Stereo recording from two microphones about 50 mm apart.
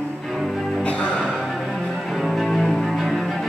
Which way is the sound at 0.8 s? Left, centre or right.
Left.